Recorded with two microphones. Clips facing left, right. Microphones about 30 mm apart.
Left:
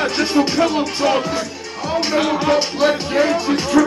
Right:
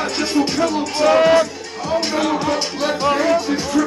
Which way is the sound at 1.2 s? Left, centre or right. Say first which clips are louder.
Right 9 dB; right.